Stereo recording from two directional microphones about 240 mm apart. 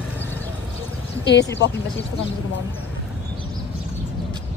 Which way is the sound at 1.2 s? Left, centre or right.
Left.